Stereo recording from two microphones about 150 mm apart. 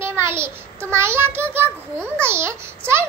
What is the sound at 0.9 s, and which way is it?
A child's voice, 15° right (ahead or behind).